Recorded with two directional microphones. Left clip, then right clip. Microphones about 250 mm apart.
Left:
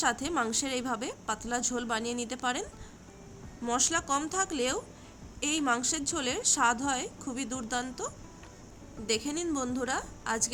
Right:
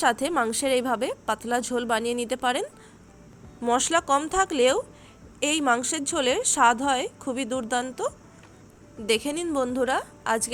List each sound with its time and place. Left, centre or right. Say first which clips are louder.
0.0 s a woman's voice: right 7 dB; centre